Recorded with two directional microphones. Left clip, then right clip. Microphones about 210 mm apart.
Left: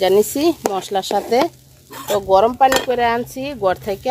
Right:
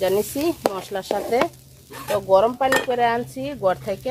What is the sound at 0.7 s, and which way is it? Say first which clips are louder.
Dishes: left 6 dB; 40° left (ahead or behind).